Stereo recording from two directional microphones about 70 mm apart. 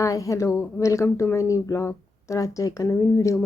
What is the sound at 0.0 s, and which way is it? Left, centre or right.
Speech, left.